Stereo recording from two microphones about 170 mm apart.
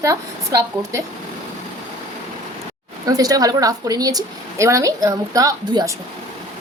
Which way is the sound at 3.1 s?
20° right (ahead or behind).